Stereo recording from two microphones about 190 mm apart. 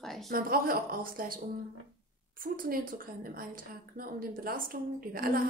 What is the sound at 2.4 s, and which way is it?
A woman's voice, 50° right (ahead or behind).